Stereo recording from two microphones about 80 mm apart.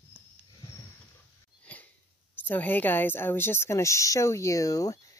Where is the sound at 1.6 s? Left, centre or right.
Centre.